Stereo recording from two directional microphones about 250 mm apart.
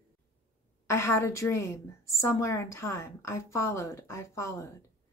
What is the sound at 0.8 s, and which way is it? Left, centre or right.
A woman's voice, centre.